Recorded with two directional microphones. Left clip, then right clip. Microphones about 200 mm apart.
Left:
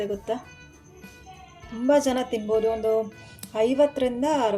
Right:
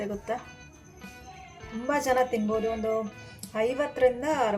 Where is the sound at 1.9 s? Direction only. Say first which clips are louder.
Left 3 dB; 30° left (ahead or behind).